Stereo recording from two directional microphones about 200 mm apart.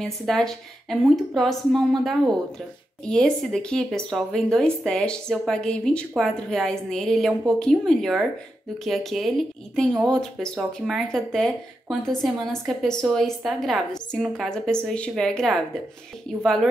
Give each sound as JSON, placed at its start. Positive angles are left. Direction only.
{"t": 0.0, "sound": "speech", "side_deg": 0}